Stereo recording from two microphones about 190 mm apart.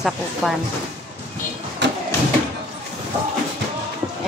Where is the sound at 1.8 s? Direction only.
70° right (ahead or behind).